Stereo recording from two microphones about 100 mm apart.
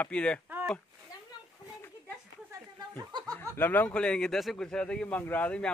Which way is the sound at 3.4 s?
20° left (ahead or behind).